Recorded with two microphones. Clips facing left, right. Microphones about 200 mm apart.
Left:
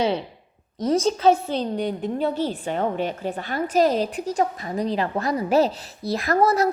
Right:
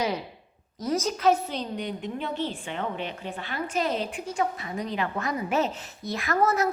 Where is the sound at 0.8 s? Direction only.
30° left (ahead or behind).